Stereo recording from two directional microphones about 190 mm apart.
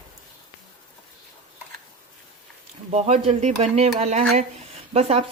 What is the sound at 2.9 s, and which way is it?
Speech, 35° right (ahead or behind).